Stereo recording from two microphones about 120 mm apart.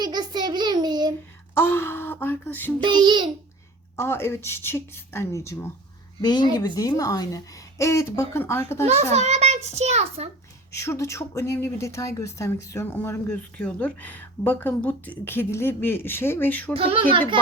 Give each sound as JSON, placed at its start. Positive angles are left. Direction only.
{"t": 0.0, "sound": "child singing", "side_deg": -35}
{"t": 1.5, "sound": "speech", "side_deg": 20}
{"t": 2.8, "sound": "a child's voice", "side_deg": -40}
{"t": 3.9, "sound": "a woman's voice", "side_deg": 20}
{"t": 6.7, "sound": "a woman's voice", "side_deg": 30}
{"t": 8.8, "sound": "a child's voice", "side_deg": -70}
{"t": 10.7, "sound": "a woman's voice", "side_deg": 25}
{"t": 16.7, "sound": "a child's voice", "side_deg": -50}